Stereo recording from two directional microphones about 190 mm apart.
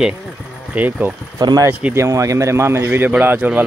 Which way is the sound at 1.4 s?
20° right (ahead or behind).